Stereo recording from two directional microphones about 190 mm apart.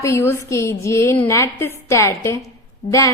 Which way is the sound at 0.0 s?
15° left (ahead or behind).